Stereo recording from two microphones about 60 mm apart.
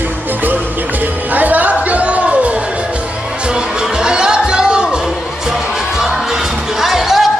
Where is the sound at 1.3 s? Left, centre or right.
Right.